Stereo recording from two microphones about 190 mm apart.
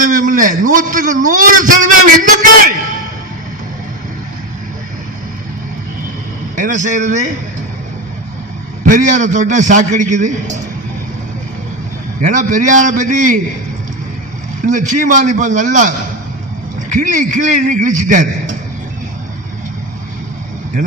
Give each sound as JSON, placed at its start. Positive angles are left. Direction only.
{"t": 0.0, "sound": "a man's voice", "side_deg": -45}
{"t": 6.6, "sound": "a man's voice", "side_deg": -40}
{"t": 8.9, "sound": "a man's voice", "side_deg": -40}
{"t": 12.2, "sound": "a man's voice", "side_deg": -45}
{"t": 14.7, "sound": "a man's voice", "side_deg": -45}
{"t": 17.0, "sound": "a man's voice", "side_deg": -40}